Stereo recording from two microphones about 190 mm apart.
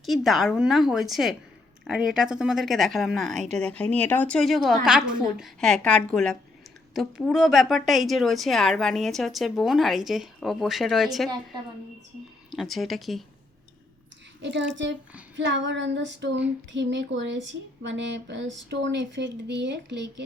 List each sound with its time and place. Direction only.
0.0 s a woman's voice: centre (ahead or behind)
12.5 s a woman's voice: centre (ahead or behind)
14.4 s speech: 65° right (ahead or behind)